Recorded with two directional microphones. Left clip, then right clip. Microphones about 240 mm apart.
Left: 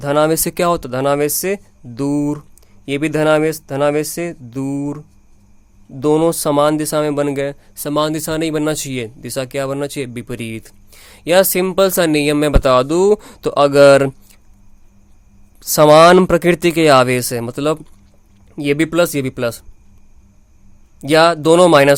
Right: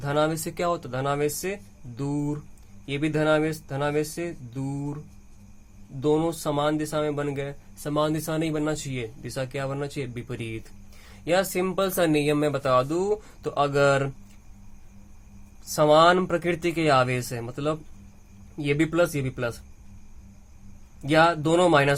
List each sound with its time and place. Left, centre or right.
0.0 s speech: left
15.6 s speech: left
21.0 s speech: left